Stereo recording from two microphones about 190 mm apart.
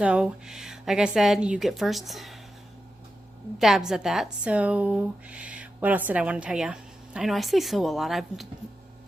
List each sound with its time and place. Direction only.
0.0 s speech: 5° right (ahead or behind)
3.6 s speech: centre (ahead or behind)